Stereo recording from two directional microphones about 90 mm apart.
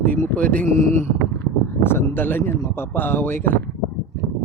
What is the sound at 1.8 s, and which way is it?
Speech, 25° left (ahead or behind).